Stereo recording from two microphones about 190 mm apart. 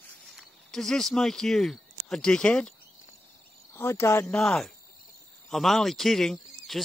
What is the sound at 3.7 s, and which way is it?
Speech, 15° left (ahead or behind).